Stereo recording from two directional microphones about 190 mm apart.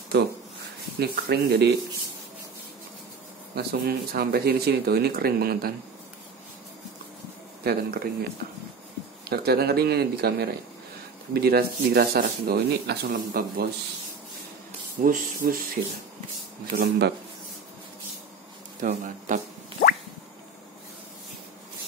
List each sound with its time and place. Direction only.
0.9 s speech: 55° right (ahead or behind)
3.5 s speech: 55° right (ahead or behind)
7.6 s speech: 55° right (ahead or behind)
9.3 s speech: 55° right (ahead or behind)
15.0 s speech: 45° right (ahead or behind)
18.8 s speech: 40° right (ahead or behind)